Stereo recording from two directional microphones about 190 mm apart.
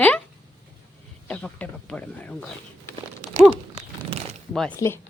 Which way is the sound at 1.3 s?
5° left (ahead or behind).